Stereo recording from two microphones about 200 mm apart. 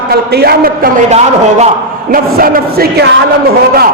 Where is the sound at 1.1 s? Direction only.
35° right (ahead or behind).